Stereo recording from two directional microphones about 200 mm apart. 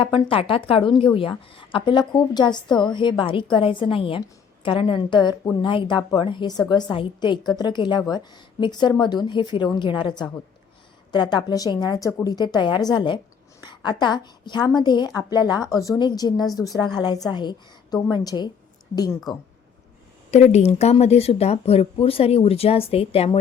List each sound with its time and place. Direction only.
0.0 s a woman's voice: 25° left (ahead or behind)
20.3 s speech: 35° left (ahead or behind)